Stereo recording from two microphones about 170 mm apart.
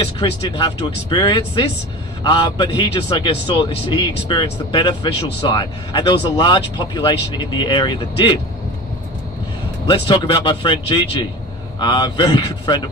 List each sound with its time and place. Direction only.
0.2 s speech: 30° left (ahead or behind)
9.8 s speech: 30° left (ahead or behind)